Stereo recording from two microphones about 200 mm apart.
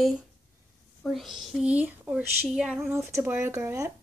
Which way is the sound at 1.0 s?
Centre (ahead or behind).